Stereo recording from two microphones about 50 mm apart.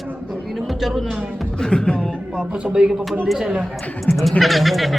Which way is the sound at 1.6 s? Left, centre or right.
Centre.